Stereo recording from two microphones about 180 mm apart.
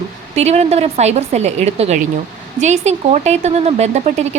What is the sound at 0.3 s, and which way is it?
Speech, 35° right (ahead or behind).